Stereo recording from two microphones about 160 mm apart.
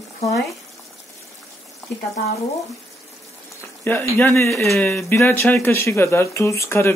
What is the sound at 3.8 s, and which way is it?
Speech, 10° left (ahead or behind).